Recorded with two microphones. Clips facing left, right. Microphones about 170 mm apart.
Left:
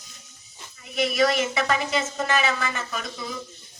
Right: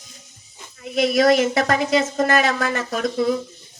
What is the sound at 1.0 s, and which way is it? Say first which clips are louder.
Speech: right 6 dB; 45° right (ahead or behind).